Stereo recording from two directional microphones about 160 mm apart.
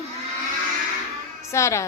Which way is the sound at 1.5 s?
15° left (ahead or behind).